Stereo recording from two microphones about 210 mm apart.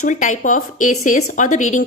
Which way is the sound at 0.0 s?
35° left (ahead or behind).